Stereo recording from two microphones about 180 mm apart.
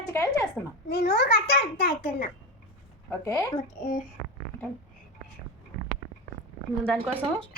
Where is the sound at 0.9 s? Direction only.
60° left (ahead or behind).